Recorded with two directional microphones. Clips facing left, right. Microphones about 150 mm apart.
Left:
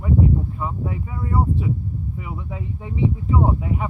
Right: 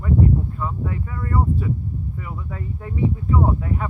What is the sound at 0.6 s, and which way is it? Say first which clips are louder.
Speech: even; 15° left (ahead or behind).